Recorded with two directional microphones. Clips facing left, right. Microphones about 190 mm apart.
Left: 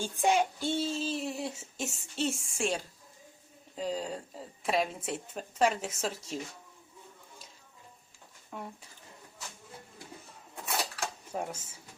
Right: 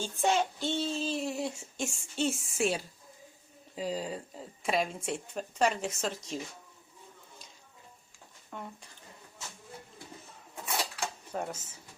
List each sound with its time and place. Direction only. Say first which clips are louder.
0.0 s speech: left 1 dB; 10° left (ahead or behind)
8.4 s speech: left 1 dB; 5° left (ahead or behind)
11.3 s speech: even; 5° left (ahead or behind)